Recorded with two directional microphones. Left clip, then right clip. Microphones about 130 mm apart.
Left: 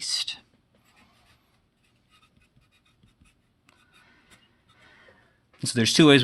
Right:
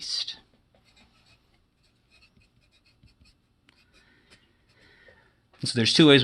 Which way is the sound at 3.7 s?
40° left (ahead or behind).